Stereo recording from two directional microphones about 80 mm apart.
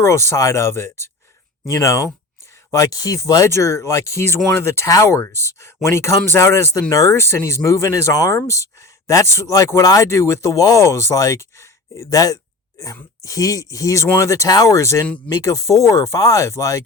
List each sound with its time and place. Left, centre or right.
0.0 s speech: left
3.4 s speech: left
10.1 s speech: left
10.8 s speech: left